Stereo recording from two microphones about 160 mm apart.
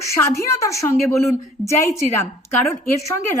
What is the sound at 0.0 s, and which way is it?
A woman's voice, 20° left (ahead or behind).